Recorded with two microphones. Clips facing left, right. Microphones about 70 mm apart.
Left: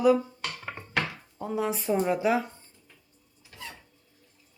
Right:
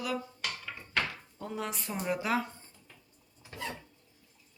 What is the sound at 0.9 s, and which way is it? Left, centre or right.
Chopping, centre.